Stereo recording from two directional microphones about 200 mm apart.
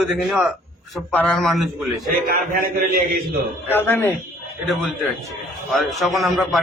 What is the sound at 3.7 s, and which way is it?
Speech, 10° left (ahead or behind).